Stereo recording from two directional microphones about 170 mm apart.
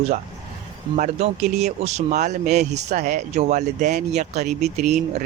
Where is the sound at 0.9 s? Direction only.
45° right (ahead or behind).